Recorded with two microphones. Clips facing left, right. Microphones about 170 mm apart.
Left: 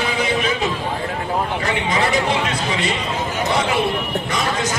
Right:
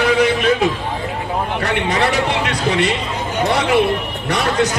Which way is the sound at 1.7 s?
65° right (ahead or behind).